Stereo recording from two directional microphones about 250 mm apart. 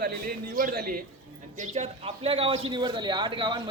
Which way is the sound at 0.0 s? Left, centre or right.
Right.